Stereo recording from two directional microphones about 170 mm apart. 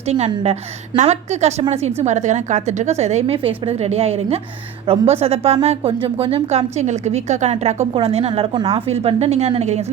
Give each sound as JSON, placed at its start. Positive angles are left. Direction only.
{"t": 0.9, "sound": "speech", "side_deg": -40}